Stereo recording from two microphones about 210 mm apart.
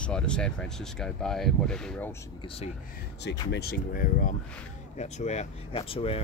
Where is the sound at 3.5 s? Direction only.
50° left (ahead or behind); by 6.2 s 25° left (ahead or behind).